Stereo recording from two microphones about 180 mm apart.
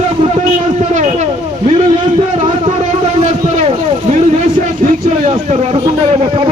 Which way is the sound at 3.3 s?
40° right (ahead or behind).